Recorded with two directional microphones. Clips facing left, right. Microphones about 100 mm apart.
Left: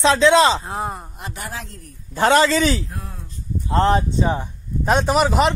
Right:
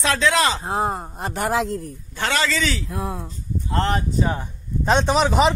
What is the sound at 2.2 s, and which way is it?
Speech, 35° left (ahead or behind).